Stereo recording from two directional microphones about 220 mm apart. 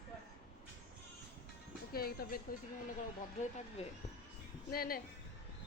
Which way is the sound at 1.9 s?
45° left (ahead or behind).